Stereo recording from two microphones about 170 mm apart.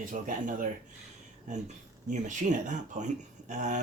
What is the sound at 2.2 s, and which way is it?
Speech, 45° right (ahead or behind).